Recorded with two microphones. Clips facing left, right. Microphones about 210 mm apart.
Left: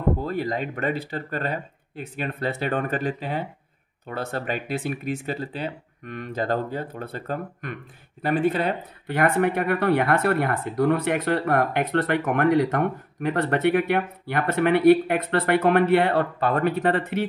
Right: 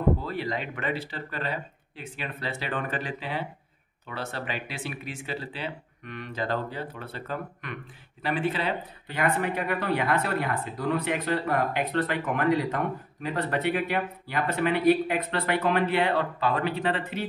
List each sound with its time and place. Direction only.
0.2 s speech: 45° left (ahead or behind)